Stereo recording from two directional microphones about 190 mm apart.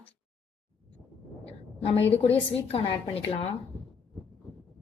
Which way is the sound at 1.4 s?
30° left (ahead or behind).